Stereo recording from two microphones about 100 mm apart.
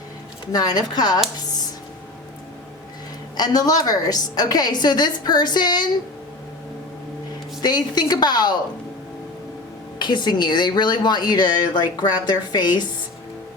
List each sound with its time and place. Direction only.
0.5 s speech: 40° left (ahead or behind)
3.3 s speech: 40° left (ahead or behind)
7.6 s speech: 45° left (ahead or behind)
10.0 s speech: 50° left (ahead or behind)